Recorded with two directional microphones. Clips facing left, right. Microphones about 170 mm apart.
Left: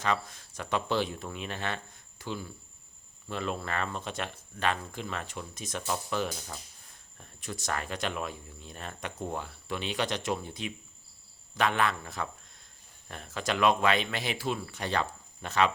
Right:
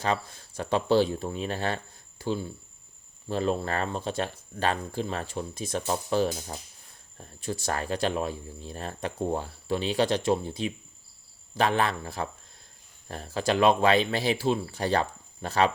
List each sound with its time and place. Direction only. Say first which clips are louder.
0.0 s speech: right 2 dB; 30° right (ahead or behind)